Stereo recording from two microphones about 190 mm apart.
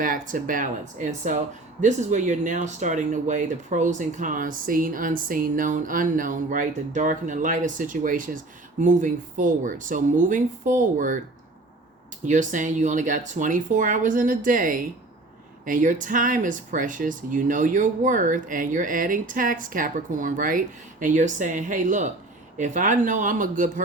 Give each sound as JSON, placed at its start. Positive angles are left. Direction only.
{"t": 0.0, "sound": "speech", "side_deg": -45}
{"t": 12.2, "sound": "speech", "side_deg": -40}